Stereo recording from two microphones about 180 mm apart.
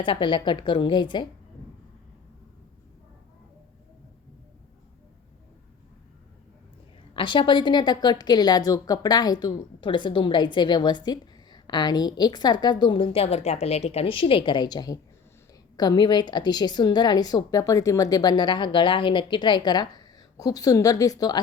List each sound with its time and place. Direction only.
0.0 s a woman's voice: 25° left (ahead or behind)
7.2 s a woman's voice: 25° left (ahead or behind)